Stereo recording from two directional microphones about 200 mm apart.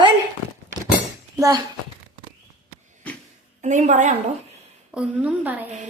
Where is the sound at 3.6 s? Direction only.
35° right (ahead or behind).